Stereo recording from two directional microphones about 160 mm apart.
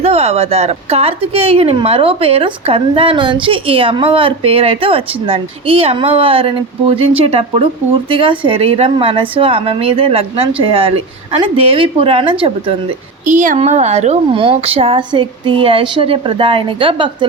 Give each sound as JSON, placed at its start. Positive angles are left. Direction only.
{"t": 0.0, "sound": "speech", "side_deg": -40}
{"t": 13.2, "sound": "a woman's voice", "side_deg": -55}